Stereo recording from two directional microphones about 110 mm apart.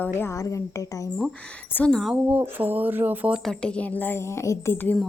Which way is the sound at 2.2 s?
15° right (ahead or behind).